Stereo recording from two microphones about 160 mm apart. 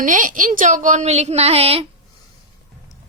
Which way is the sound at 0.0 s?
55° right (ahead or behind).